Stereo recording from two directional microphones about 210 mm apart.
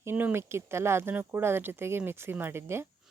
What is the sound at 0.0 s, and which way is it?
Speech, 10° right (ahead or behind).